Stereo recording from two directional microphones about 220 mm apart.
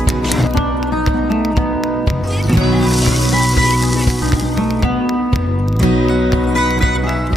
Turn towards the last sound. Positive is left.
turn(degrees=0)  # may be behind; listen again after turning